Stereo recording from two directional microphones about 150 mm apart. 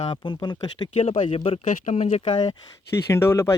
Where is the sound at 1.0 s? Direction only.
40° left (ahead or behind).